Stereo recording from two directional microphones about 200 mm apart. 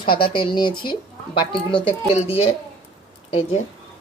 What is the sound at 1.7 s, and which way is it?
Speech, 30° left (ahead or behind).